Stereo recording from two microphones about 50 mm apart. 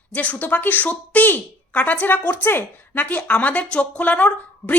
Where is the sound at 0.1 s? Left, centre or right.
Left.